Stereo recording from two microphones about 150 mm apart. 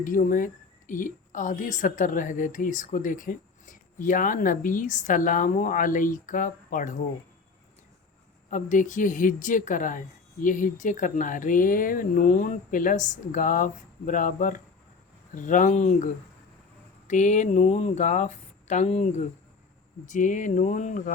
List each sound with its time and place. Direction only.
0.0 s a woman's voice: 60° left (ahead or behind)
8.4 s a woman's voice: 60° left (ahead or behind)
17.1 s speech: 55° left (ahead or behind)
20.1 s a woman's voice: 60° left (ahead or behind)